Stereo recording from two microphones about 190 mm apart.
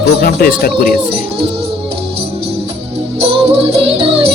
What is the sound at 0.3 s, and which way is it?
Speech, 50° left (ahead or behind).